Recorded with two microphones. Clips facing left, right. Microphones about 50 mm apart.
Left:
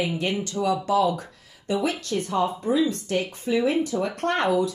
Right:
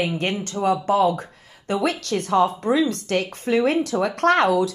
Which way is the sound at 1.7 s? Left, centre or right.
Right.